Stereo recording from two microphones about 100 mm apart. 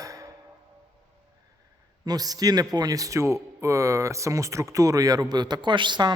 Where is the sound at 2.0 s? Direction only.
40° right (ahead or behind).